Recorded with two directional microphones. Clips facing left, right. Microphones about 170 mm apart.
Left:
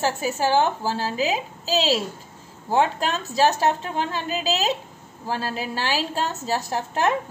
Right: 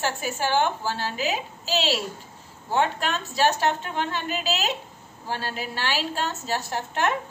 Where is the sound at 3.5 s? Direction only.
35° left (ahead or behind).